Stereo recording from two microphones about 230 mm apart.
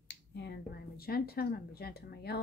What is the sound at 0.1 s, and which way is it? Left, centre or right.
Speech, left.